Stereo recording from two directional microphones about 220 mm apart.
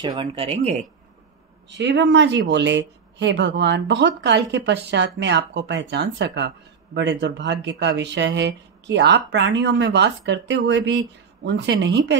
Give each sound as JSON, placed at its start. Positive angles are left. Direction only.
{"t": 0.0, "sound": "speech", "side_deg": -25}
{"t": 1.7, "sound": "speech", "side_deg": -50}